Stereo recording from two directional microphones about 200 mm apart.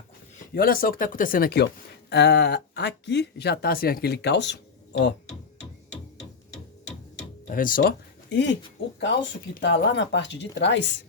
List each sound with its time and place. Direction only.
0.5 s speech: 45° left (ahead or behind)
7.5 s speech: 45° left (ahead or behind)
9.6 s speech: 55° left (ahead or behind)